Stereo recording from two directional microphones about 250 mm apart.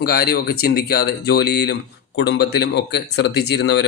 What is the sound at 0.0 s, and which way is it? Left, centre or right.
Speech, left.